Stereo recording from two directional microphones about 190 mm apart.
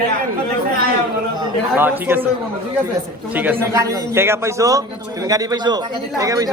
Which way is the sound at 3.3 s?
10° right (ahead or behind).